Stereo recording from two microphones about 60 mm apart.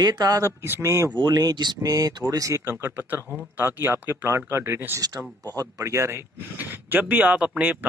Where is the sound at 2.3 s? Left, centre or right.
Right.